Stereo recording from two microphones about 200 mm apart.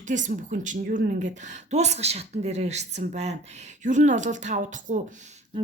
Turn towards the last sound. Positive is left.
turn(degrees=-40)  # may be behind; listen again after turning